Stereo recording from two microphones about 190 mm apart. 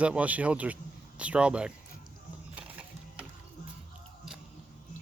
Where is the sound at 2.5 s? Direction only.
5° right (ahead or behind).